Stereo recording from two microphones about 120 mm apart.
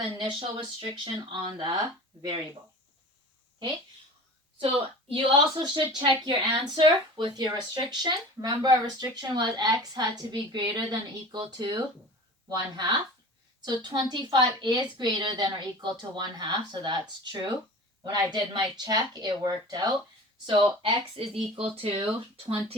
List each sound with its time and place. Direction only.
0.2 s speech: 40° right (ahead or behind)
4.6 s speech: 50° right (ahead or behind); by 19.9 s 35° right (ahead or behind)
20.8 s speech: 50° right (ahead or behind)